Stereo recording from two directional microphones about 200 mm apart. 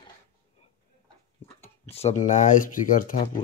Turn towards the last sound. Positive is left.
turn(degrees=40)  # may be behind; listen again after turning